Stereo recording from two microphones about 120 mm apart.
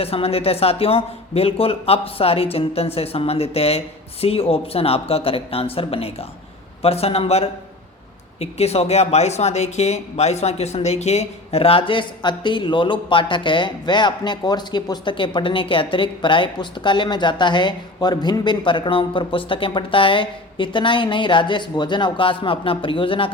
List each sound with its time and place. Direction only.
0.0 s speech: 55° left (ahead or behind)